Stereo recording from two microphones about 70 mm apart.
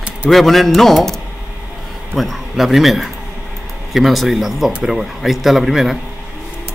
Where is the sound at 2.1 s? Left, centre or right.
Centre.